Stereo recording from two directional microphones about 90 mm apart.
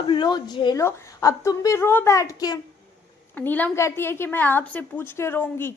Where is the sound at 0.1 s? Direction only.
55° left (ahead or behind).